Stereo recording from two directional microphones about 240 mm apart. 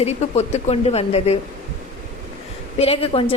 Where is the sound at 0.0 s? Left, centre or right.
Left.